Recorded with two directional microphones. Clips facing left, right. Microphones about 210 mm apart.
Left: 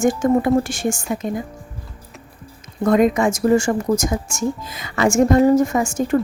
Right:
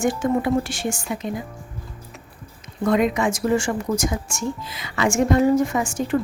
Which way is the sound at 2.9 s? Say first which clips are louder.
Left 4 dB; 45° left (ahead or behind).